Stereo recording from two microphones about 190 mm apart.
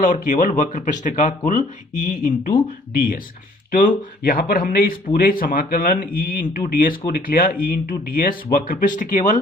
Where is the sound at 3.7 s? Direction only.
45° left (ahead or behind).